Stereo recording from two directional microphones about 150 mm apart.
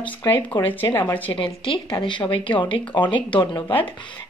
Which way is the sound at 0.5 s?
30° left (ahead or behind).